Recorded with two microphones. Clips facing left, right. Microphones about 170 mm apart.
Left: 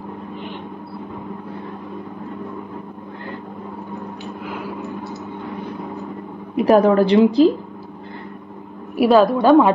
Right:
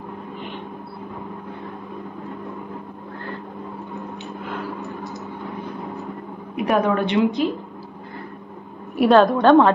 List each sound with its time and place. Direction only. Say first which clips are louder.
6.5 s a woman's voice: left 6 dB; 35° left (ahead or behind)
8.9 s a woman's voice: left 1 dB; 5° left (ahead or behind)